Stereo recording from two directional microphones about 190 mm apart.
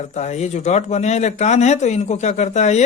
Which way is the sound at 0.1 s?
35° left (ahead or behind).